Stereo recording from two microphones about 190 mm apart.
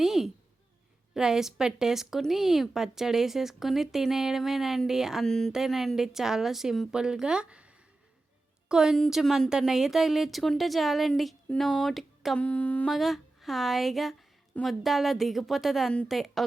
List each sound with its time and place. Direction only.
0.0 s a sound: centre (ahead or behind)
1.1 s a woman's voice: centre (ahead or behind)
8.7 s a woman's voice: 5° right (ahead or behind)